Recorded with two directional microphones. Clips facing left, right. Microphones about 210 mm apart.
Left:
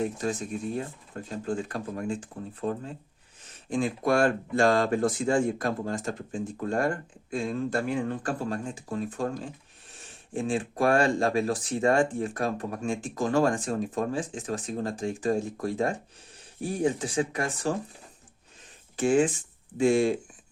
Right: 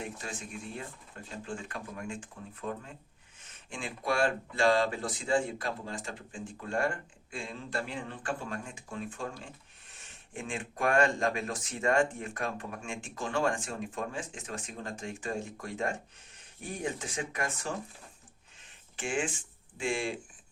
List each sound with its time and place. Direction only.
0.0 s speech: 40° left (ahead or behind)
18.9 s speech: 40° left (ahead or behind)